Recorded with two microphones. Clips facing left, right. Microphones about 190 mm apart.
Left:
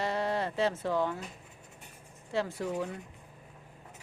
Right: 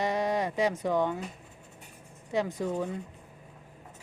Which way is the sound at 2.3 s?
15° right (ahead or behind).